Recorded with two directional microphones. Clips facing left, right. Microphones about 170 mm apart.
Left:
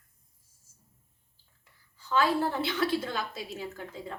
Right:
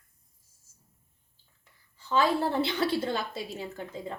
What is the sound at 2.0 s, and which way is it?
A woman's voice, 25° right (ahead or behind).